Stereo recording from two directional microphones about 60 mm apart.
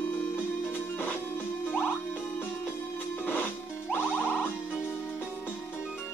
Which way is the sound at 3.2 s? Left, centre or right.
Left.